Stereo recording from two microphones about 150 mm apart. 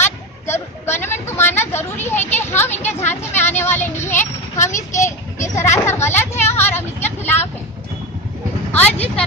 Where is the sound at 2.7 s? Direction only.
50° left (ahead or behind).